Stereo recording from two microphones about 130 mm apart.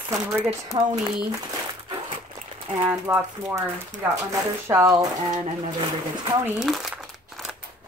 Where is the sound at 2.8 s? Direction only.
15° right (ahead or behind).